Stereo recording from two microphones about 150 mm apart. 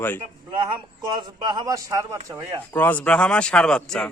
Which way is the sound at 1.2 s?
30° right (ahead or behind).